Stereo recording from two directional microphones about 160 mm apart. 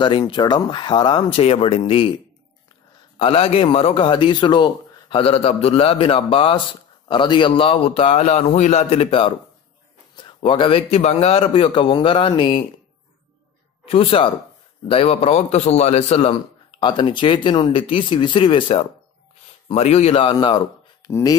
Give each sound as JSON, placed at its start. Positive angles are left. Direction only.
{"t": 0.0, "sound": "speech", "side_deg": 30}
{"t": 3.2, "sound": "a man's voice", "side_deg": 35}
{"t": 13.8, "sound": "a man's voice", "side_deg": 35}